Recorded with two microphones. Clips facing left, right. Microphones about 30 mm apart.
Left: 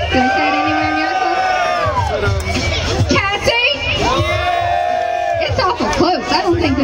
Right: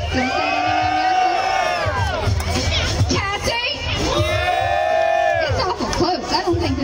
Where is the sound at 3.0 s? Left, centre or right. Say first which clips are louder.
Left 6 dB; left; by 5.4 s centre.